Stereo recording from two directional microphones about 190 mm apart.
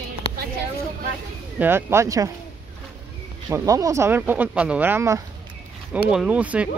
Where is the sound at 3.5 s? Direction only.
20° right (ahead or behind).